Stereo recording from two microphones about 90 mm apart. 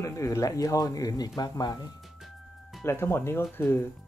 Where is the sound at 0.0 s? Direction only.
35° left (ahead or behind).